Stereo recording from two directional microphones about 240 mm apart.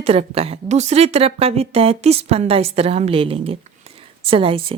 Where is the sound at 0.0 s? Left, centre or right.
Right.